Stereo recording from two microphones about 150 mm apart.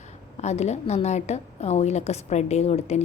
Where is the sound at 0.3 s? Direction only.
45° left (ahead or behind).